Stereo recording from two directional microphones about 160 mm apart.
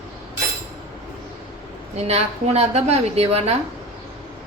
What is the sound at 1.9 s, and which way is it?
A woman's voice, 40° right (ahead or behind).